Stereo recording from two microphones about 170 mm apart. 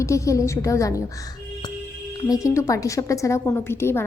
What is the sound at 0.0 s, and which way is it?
A woman's voice, 20° left (ahead or behind).